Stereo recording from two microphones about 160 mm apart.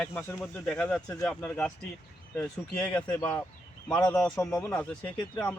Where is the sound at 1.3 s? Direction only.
5° left (ahead or behind).